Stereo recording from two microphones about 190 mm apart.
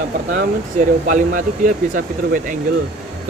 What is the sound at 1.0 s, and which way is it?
Speech, 45° right (ahead or behind).